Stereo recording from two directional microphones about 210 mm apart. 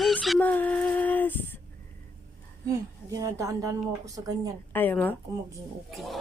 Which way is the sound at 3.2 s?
15° right (ahead or behind).